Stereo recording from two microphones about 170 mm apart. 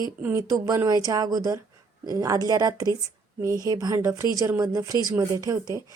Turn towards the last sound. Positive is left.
turn(degrees=-20)  # may be behind; listen again after turning